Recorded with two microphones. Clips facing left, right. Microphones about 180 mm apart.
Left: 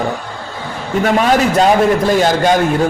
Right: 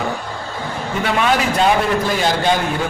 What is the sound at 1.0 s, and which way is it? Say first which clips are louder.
A man's voice: left 5 dB; 40° left (ahead or behind).